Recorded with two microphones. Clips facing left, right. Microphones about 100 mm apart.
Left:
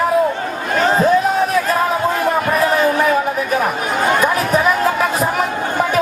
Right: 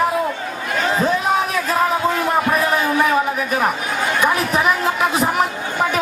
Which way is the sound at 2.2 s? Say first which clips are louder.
Left 1 dB; 50° left (ahead or behind).